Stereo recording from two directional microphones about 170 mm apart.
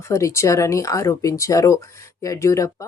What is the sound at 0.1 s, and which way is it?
Speech, 20° left (ahead or behind).